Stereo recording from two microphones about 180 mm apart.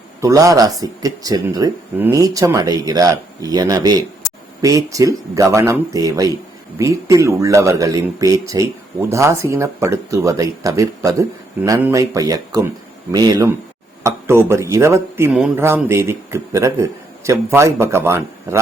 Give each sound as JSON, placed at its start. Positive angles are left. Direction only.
{"t": 0.2, "sound": "speech", "side_deg": -20}